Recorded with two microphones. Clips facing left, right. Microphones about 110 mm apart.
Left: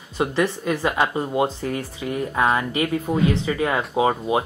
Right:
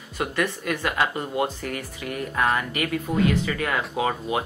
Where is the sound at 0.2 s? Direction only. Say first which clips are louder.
Left 4 dB; 30° left (ahead or behind).